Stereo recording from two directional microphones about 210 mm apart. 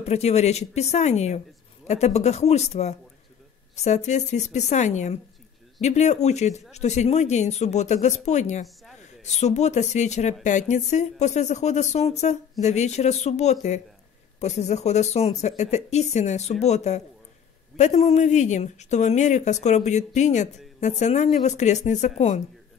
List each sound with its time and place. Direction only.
0.0 s speech: 30° left (ahead or behind)